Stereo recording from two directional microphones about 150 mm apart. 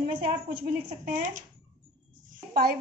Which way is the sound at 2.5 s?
90° right.